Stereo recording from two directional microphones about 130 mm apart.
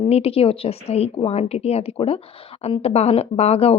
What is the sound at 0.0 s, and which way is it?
A woman's voice, 50° left (ahead or behind).